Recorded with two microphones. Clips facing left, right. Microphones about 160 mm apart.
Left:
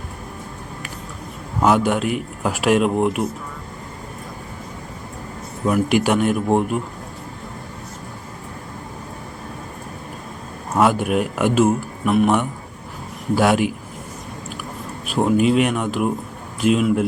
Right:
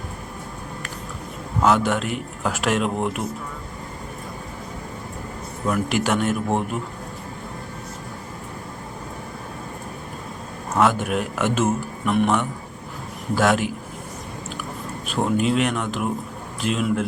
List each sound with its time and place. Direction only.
1.6 s speech: 15° left (ahead or behind)
5.7 s speech: 15° left (ahead or behind)
10.8 s speech: 10° left (ahead or behind)
15.1 s speech: 10° left (ahead or behind)